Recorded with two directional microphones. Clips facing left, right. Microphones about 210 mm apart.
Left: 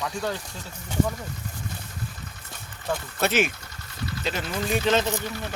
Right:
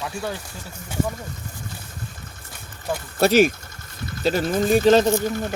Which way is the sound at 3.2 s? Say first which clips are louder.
Right 9 dB; 35° right (ahead or behind).